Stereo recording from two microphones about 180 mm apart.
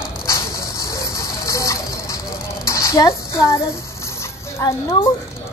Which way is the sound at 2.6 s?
15° left (ahead or behind).